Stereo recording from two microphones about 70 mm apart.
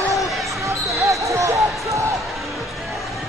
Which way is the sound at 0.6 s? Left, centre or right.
Right.